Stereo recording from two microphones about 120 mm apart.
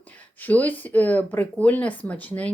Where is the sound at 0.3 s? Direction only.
15° left (ahead or behind).